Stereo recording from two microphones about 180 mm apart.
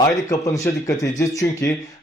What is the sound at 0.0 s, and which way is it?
Speech, 20° left (ahead or behind).